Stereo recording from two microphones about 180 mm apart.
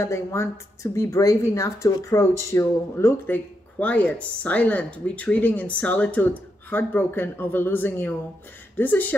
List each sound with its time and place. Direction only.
0.0 s speech: 15° left (ahead or behind)